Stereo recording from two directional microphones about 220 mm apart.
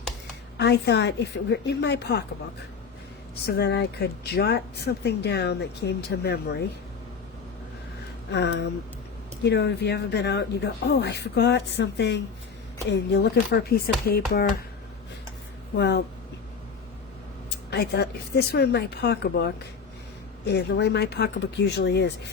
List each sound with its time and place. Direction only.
0.5 s speech: 50° left (ahead or behind)
3.4 s speech: 45° left (ahead or behind)
8.3 s speech: 50° left (ahead or behind)
15.7 s speech: 50° left (ahead or behind)
17.7 s speech: 50° left (ahead or behind)